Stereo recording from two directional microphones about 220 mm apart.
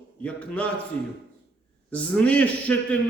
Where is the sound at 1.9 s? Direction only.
5° left (ahead or behind).